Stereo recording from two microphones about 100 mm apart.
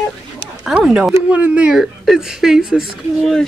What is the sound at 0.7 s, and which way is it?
A woman's voice, 10° right (ahead or behind).